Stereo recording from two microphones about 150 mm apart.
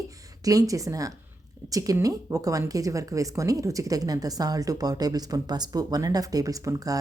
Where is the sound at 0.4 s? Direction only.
25° right (ahead or behind).